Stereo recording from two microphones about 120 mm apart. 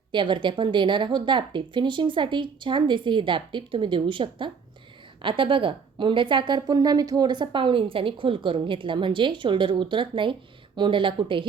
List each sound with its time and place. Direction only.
0.1 s a woman's voice: 40° right (ahead or behind)